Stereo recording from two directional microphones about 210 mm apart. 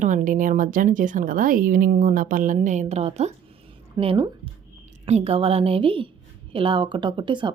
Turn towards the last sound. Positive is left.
turn(degrees=-20)  # may be behind; listen again after turning